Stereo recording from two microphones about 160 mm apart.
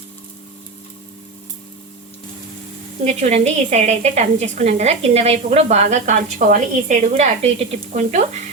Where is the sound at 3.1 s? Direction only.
45° right (ahead or behind).